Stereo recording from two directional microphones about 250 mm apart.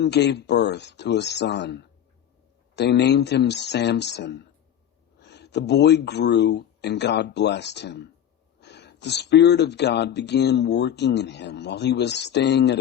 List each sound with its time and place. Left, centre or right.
0.0 s speech: left